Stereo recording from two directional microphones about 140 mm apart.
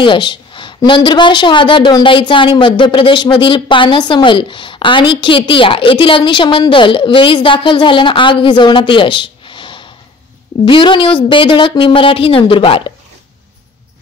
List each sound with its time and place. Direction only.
0.0 s a woman's voice: 35° left (ahead or behind)